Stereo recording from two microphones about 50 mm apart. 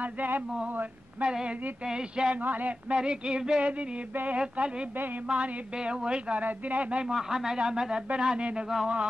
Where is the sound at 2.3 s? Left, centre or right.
Right.